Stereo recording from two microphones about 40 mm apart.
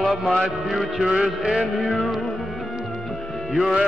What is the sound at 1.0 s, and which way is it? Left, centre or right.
Music, centre.